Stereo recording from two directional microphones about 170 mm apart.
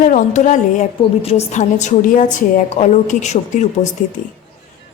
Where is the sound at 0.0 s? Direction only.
50° left (ahead or behind).